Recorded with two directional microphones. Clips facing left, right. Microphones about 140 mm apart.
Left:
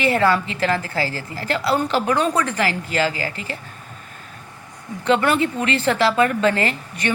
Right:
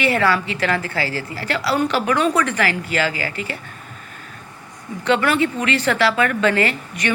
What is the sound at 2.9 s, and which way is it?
Speech, 40° left (ahead or behind).